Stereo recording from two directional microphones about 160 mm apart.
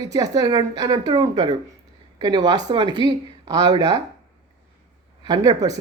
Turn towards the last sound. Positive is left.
turn(degrees=-20)  # may be behind; listen again after turning